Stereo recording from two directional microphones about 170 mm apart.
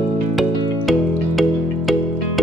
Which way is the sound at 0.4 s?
Centre (ahead or behind).